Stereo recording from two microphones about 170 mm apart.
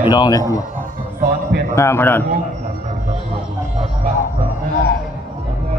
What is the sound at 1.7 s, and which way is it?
Speech, 15° left (ahead or behind).